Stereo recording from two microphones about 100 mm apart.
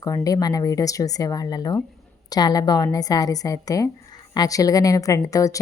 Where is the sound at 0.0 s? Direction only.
35° left (ahead or behind).